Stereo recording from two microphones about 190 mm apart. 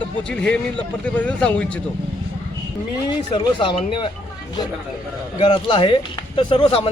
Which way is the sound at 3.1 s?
25° left (ahead or behind).